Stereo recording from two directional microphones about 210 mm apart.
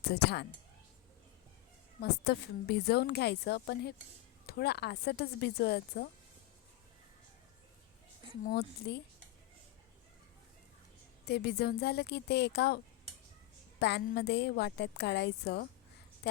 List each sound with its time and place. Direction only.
0.0 s speech: 50° left (ahead or behind)
2.0 s a woman's voice: 50° left (ahead or behind)
8.4 s a woman's voice: 50° left (ahead or behind)
11.3 s a woman's voice: 50° left (ahead or behind)